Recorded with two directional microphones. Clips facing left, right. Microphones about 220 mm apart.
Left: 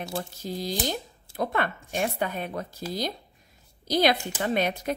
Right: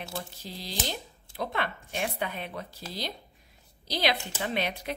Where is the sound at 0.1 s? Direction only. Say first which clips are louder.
Left 7 dB; 45° left (ahead or behind).